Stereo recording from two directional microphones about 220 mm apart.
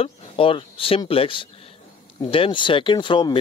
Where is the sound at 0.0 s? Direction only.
25° left (ahead or behind).